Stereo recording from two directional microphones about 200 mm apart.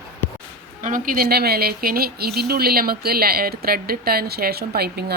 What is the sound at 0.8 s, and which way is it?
Speech, 45° right (ahead or behind).